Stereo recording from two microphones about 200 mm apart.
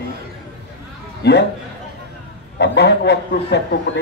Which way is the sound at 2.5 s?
60° left (ahead or behind).